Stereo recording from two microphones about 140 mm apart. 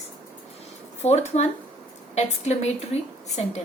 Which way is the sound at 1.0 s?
50° left (ahead or behind).